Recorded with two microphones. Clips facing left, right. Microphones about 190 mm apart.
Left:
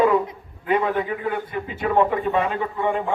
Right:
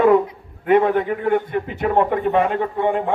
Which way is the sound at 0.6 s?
60° right (ahead or behind).